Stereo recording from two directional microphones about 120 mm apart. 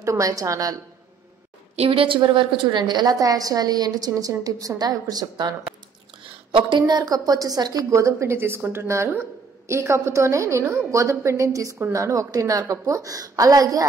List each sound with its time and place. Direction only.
0.0 s a woman's voice: 25° right (ahead or behind)
1.8 s a woman's voice: 50° right (ahead or behind)
6.5 s a woman's voice: 40° right (ahead or behind)